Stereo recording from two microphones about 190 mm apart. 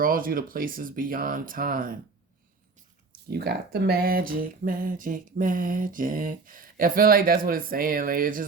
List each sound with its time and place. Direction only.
0.0 s speech: 50° right (ahead or behind)
3.2 s speech: 55° right (ahead or behind)